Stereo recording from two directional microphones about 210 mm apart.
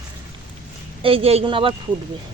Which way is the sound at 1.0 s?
25° right (ahead or behind).